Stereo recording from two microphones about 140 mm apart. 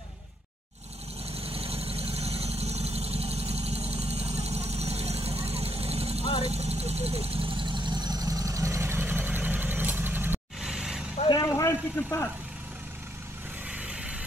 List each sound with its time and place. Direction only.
1.3 s vehicle: 45° right (ahead or behind); by 11.1 s 5° right (ahead or behind)
11.4 s vehicle: 20° left (ahead or behind)
13.7 s vehicle: 10° right (ahead or behind)